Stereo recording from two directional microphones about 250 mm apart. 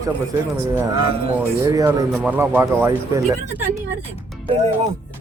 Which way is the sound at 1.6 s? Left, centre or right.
Centre.